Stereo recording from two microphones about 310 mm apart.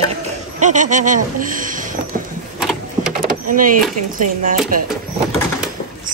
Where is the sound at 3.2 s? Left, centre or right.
Right.